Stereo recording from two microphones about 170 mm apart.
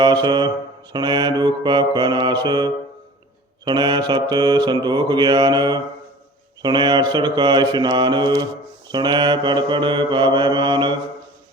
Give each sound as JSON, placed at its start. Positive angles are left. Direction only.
{"t": 0.0, "sound": "mantra", "side_deg": -25}